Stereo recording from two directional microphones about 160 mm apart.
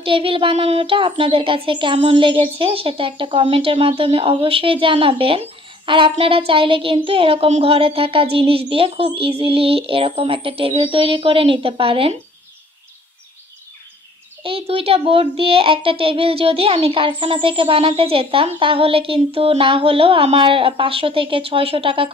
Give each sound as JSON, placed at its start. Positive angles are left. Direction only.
{"t": 0.0, "sound": "a child's voice", "side_deg": -35}
{"t": 14.4, "sound": "a child's voice", "side_deg": -35}